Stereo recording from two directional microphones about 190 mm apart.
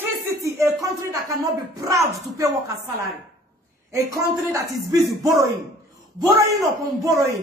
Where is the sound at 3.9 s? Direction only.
15° right (ahead or behind).